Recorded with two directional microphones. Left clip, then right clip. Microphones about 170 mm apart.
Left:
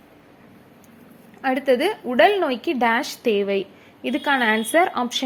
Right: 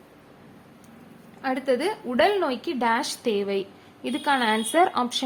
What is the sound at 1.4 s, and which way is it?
Speech, 25° left (ahead or behind).